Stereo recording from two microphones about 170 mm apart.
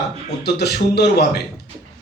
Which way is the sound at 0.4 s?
70° left (ahead or behind).